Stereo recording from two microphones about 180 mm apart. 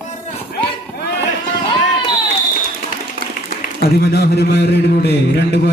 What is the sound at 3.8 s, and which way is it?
A man's voice, 60° left (ahead or behind).